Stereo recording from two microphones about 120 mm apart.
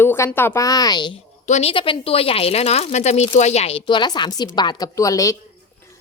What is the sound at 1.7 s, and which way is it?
Speech, 45° left (ahead or behind).